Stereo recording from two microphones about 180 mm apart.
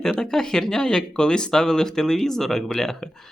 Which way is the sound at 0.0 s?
5° left (ahead or behind).